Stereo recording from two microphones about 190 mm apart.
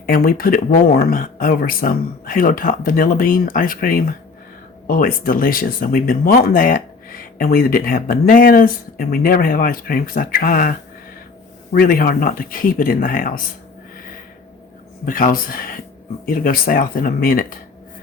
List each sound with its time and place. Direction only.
0.0 s speech: 50° left (ahead or behind)
15.0 s speech: 45° left (ahead or behind)